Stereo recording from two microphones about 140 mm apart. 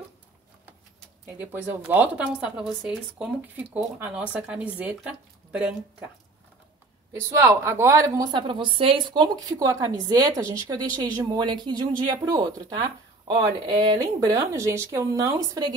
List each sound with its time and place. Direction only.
1.4 s speech: 15° right (ahead or behind)
7.1 s a woman's voice: 20° right (ahead or behind)